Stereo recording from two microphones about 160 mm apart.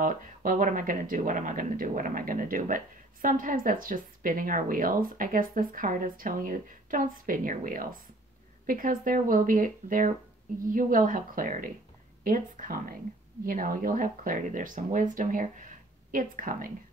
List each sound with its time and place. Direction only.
0.0 s speech: 60° right (ahead or behind)